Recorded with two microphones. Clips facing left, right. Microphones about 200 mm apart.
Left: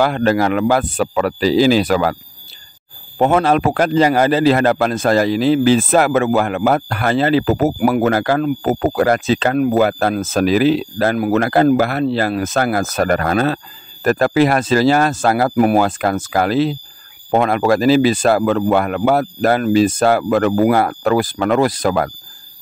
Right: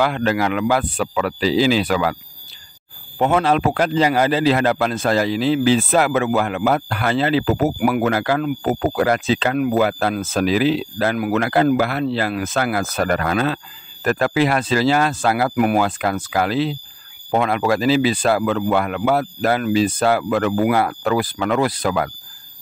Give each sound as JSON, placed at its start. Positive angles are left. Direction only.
{"t": 0.0, "sound": "a man's voice", "side_deg": 40}
{"t": 3.2, "sound": "a man's voice", "side_deg": 45}